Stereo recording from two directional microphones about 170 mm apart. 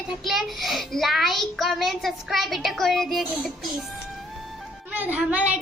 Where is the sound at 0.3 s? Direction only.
Centre (ahead or behind).